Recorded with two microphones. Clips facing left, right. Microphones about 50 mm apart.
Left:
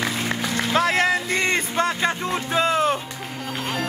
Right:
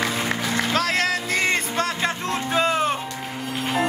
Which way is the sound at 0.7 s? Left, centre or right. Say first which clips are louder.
Left 5 dB; centre.